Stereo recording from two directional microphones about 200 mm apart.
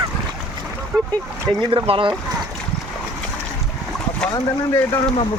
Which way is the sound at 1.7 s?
25° right (ahead or behind).